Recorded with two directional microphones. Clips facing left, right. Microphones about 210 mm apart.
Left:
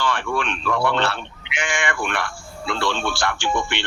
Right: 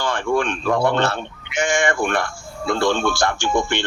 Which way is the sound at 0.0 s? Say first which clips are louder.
Right 4 dB; 45° right (ahead or behind).